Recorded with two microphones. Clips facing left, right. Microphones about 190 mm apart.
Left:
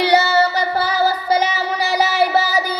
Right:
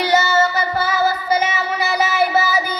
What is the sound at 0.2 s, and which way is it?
Child singing, 35° left (ahead or behind).